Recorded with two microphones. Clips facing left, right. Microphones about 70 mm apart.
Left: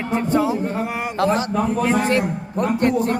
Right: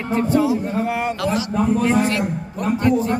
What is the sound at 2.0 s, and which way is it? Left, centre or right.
Speech, left.